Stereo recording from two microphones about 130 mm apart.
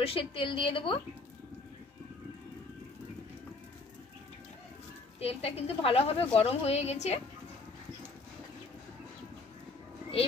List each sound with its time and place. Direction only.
0.0 s a woman's voice: 45° left (ahead or behind)
5.2 s a woman's voice: 50° left (ahead or behind)